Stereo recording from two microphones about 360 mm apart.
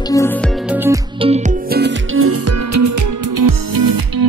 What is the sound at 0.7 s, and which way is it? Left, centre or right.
Music, centre.